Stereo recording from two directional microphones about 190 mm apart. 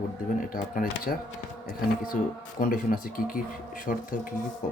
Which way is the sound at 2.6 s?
45° left (ahead or behind).